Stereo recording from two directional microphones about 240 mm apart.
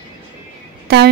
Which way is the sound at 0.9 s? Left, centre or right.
Right.